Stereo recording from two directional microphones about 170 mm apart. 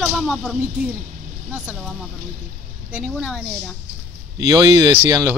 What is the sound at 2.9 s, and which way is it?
Speech, 5° right (ahead or behind).